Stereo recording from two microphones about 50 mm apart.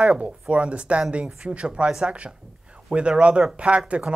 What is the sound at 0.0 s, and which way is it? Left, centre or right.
Speech, right.